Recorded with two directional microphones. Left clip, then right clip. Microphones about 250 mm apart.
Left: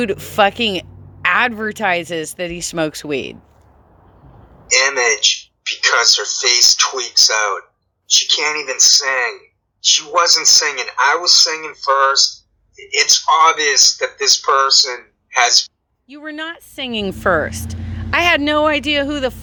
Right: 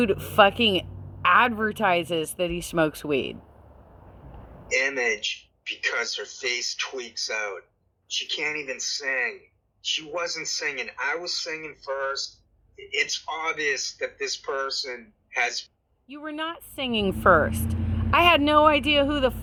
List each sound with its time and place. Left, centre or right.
0.0 s a woman's voice: centre
4.6 s speech: centre
16.0 s a woman's voice: centre